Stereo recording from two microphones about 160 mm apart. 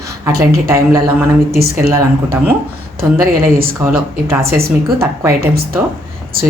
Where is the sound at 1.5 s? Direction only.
75° right (ahead or behind).